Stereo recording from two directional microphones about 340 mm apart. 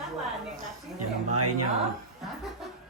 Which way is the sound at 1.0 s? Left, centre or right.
Right.